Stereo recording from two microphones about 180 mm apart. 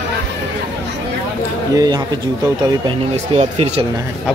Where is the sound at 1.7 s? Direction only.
20° right (ahead or behind).